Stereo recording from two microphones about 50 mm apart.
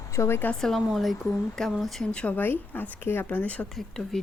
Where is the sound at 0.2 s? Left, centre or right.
Left.